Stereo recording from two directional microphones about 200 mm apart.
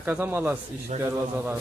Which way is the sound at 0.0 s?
10° right (ahead or behind).